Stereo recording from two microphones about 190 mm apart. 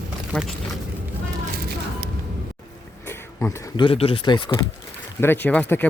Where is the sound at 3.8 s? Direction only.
30° left (ahead or behind).